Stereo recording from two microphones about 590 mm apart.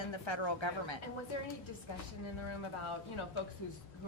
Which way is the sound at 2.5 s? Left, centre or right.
Left.